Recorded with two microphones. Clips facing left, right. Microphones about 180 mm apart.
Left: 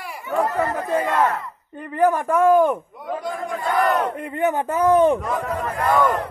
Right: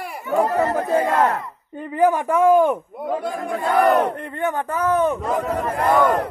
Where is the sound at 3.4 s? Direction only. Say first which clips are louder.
Right 4 dB; 30° right (ahead or behind).